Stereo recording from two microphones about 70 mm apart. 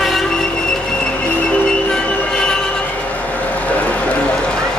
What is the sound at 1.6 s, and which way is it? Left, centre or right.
Music, centre.